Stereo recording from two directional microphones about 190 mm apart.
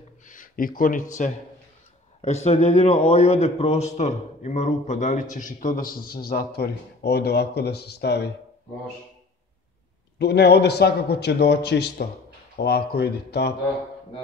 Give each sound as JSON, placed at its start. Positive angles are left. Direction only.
{"t": 0.2, "sound": "a sound", "side_deg": 45}
{"t": 2.2, "sound": "a man's voice", "side_deg": 35}
{"t": 10.1, "sound": "a man's voice", "side_deg": 60}